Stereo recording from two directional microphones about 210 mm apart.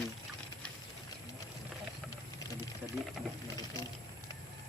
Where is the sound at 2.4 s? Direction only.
15° left (ahead or behind).